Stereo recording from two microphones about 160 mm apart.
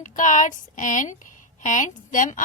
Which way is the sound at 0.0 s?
55° left (ahead or behind).